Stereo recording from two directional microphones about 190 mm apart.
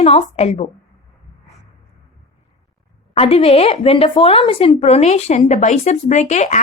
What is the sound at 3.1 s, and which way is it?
Speech, 30° left (ahead or behind).